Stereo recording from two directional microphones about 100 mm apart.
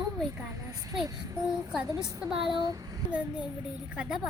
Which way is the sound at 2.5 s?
40° right (ahead or behind).